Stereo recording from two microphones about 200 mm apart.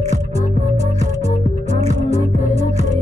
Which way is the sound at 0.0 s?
35° right (ahead or behind).